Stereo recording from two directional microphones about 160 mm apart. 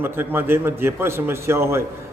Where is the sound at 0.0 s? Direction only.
15° right (ahead or behind).